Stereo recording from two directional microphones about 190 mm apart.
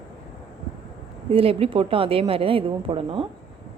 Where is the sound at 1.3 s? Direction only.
30° right (ahead or behind).